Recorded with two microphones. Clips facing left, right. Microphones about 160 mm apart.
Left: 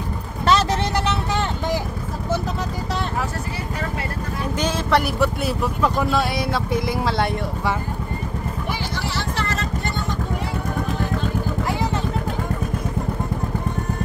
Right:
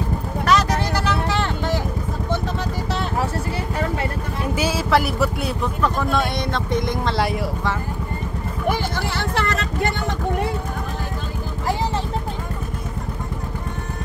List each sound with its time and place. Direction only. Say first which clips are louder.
0.5 s a sound: left 1 dB; 25° left (ahead or behind)
4.6 s vehicle: right 1 dB; 5° right (ahead or behind)
5.8 s speech: even; 10° left (ahead or behind)
8.6 s vehicle: right 9 dB; 55° right (ahead or behind)